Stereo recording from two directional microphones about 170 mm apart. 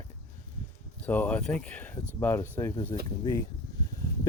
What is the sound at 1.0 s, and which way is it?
Speech, 10° left (ahead or behind).